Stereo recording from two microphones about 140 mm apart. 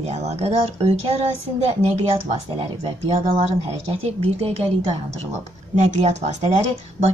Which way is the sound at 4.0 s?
45° right (ahead or behind).